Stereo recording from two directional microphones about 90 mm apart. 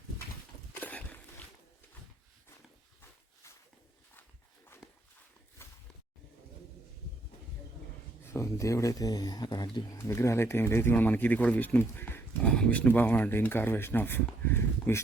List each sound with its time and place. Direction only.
0.8 s walk: 15° left (ahead or behind)
4.8 s walk: 5° right (ahead or behind)
5.6 s a sound: 30° left (ahead or behind)
8.3 s speech: 35° left (ahead or behind)
10.1 s speech: 30° left (ahead or behind)